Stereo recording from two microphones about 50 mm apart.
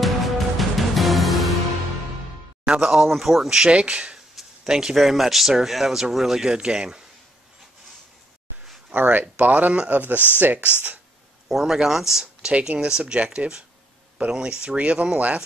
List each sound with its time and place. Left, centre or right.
0.0 s music: centre
2.6 s speech: centre
4.4 s a sound: centre
4.9 s speech: centre
8.9 s speech: right
11.4 s speech: centre; by 15.4 s right